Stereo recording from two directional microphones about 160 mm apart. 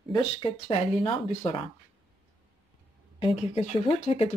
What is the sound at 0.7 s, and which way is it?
Speech, 35° left (ahead or behind).